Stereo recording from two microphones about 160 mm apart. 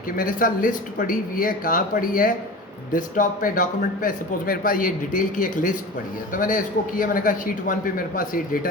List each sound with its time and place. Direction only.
0.2 s a man's voice: 60° left (ahead or behind)